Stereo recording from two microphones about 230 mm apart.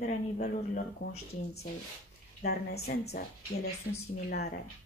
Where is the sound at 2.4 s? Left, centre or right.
Left.